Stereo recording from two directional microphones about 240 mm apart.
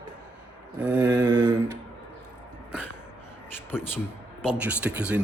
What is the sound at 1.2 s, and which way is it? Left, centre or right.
Speech, centre.